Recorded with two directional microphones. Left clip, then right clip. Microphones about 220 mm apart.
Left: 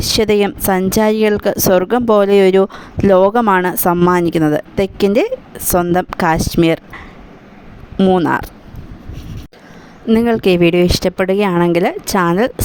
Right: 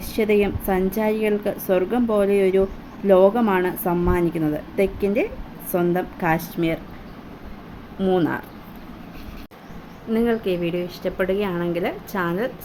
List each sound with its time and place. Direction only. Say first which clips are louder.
0.0 s speech: left 7 dB; 50° left (ahead or behind)
7.9 s speech: left 8 dB; 45° left (ahead or behind)
10.1 s speech: left 9 dB; 50° left (ahead or behind)